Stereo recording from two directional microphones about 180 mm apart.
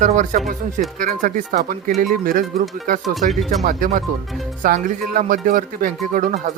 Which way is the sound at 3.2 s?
50° right (ahead or behind).